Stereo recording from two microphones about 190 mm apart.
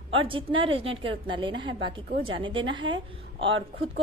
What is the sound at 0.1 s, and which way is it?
A woman's voice, 30° right (ahead or behind).